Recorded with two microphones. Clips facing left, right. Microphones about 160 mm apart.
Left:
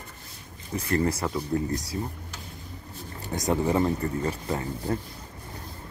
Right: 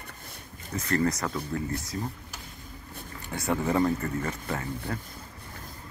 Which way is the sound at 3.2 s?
40° left (ahead or behind).